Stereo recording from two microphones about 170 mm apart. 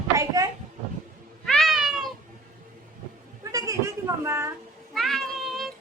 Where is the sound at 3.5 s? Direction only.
20° right (ahead or behind).